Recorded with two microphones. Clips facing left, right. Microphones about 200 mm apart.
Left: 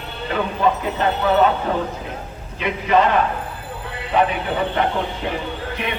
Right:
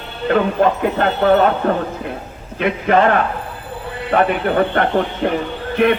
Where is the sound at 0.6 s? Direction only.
60° right (ahead or behind).